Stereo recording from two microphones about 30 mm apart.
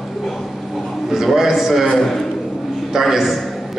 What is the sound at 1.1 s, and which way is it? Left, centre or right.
Speech, centre.